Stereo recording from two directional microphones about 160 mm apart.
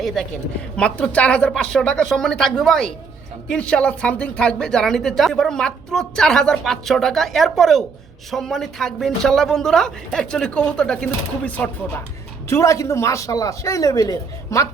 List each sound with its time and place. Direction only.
0.8 s speech: 5° left (ahead or behind)